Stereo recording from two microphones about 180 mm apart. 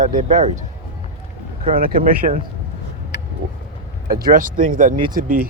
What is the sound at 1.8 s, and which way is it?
Speech, 50° right (ahead or behind).